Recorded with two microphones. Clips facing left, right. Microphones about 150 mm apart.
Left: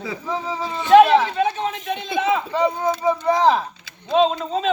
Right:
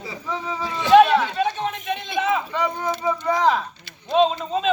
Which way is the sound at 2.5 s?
30° left (ahead or behind).